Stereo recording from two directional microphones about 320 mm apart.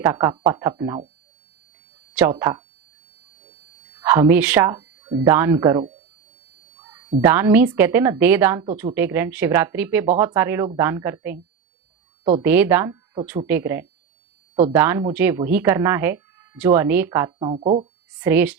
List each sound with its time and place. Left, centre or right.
0.0 s speech: centre
2.1 s speech: centre
4.0 s speech: centre
7.2 s a woman's voice: centre
12.5 s speech: centre
18.3 s a woman's voice: centre